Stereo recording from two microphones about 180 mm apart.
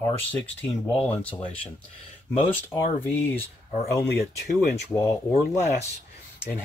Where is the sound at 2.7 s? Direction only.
10° left (ahead or behind).